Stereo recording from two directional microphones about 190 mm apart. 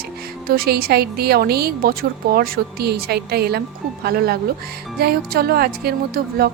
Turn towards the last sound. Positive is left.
turn(degrees=-55)  # may be behind; listen again after turning